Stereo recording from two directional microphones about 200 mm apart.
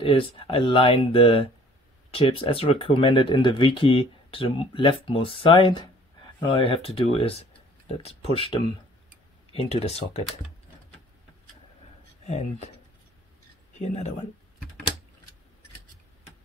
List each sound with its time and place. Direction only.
0.0 s speech: 25° left (ahead or behind)
12.3 s speech: 35° left (ahead or behind)
13.7 s speech: 35° left (ahead or behind)